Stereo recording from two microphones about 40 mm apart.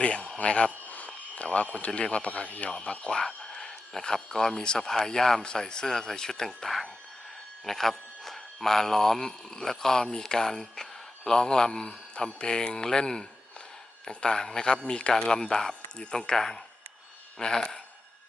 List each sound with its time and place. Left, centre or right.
0.0 s speech: left
0.9 s a sound: left
1.9 s speech: left
3.1 s speech: centre